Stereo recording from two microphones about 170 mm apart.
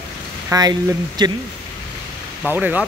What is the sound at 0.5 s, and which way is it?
Speech, 20° right (ahead or behind).